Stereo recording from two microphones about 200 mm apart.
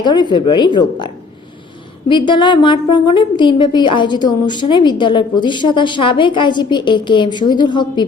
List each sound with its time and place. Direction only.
0.0 s a woman's voice: 20° left (ahead or behind)